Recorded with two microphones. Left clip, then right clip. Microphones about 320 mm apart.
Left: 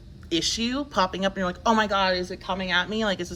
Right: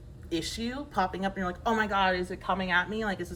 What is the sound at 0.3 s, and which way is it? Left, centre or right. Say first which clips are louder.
Speech: left 8 dB; centre.